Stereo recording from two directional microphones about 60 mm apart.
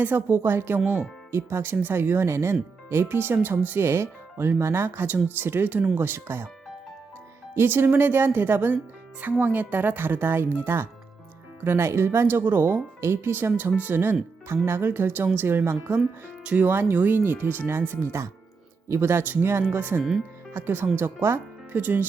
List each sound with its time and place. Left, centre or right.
0.0 s speech: right
3.8 s speech: right
7.5 s speech: right
16.4 s speech: centre
16.6 s speech: right
20.0 s speech: centre
20.5 s speech: right